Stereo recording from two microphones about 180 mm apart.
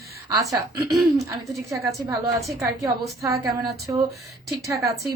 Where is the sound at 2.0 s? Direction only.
15° right (ahead or behind).